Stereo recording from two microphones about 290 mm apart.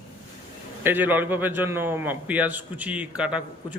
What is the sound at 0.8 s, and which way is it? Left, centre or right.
A man's voice, centre.